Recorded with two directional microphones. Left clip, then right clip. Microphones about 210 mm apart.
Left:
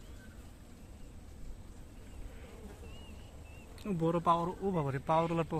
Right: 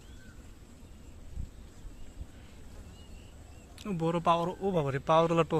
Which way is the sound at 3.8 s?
5° right (ahead or behind).